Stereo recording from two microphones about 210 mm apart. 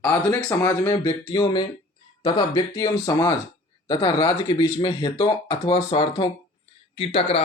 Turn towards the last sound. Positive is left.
turn(degrees=30)  # may be behind; listen again after turning